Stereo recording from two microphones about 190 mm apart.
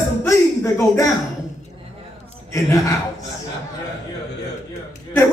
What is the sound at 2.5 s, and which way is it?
Speech, 15° left (ahead or behind).